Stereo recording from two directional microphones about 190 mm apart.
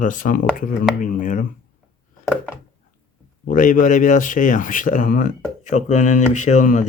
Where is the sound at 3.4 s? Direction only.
45° left (ahead or behind).